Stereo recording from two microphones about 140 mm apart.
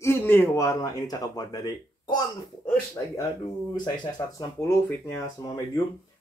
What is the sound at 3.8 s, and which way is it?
Speech, 30° left (ahead or behind).